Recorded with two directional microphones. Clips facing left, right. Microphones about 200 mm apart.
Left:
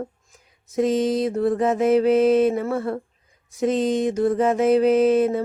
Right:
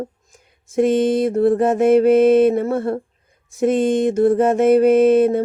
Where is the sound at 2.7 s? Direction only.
30° right (ahead or behind).